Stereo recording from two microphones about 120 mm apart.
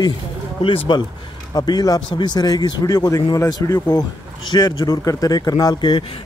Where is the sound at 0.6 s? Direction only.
40° left (ahead or behind).